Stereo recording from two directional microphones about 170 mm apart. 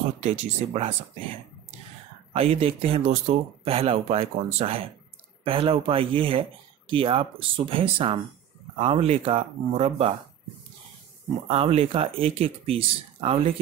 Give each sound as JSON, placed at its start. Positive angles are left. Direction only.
{"t": 0.2, "sound": "speech", "side_deg": -40}
{"t": 11.4, "sound": "speech", "side_deg": -35}